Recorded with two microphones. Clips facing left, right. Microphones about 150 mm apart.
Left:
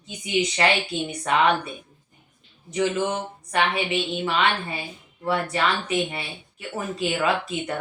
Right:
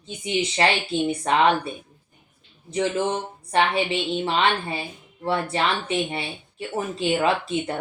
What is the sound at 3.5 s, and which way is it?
A woman's voice, 30° right (ahead or behind).